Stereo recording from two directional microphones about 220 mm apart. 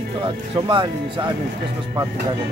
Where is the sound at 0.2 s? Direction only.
20° right (ahead or behind).